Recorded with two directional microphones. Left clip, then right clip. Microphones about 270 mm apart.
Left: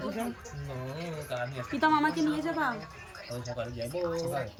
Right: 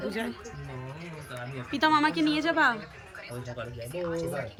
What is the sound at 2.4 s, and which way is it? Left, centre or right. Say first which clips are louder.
Speech: right 6 dB; centre.